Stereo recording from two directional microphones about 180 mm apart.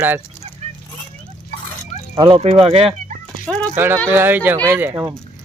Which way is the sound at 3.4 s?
5° left (ahead or behind).